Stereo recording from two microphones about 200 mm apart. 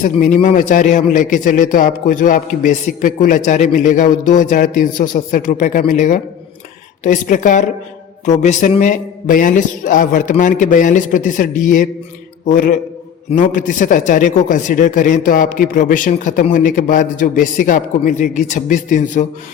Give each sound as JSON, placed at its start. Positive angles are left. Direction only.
{"t": 0.0, "sound": "speech", "side_deg": 40}